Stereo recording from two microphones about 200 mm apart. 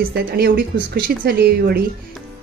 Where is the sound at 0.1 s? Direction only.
50° right (ahead or behind).